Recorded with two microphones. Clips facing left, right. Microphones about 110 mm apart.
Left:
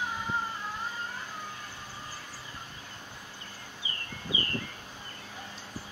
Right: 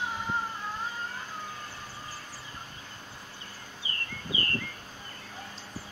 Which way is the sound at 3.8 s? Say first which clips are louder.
Even; 15° left (ahead or behind).